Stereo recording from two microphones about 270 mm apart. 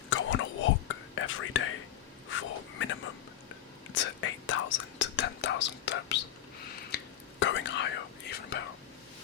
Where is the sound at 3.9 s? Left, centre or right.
Left.